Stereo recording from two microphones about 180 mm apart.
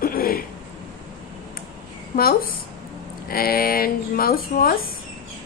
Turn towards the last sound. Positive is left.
turn(degrees=55)  # may be behind; listen again after turning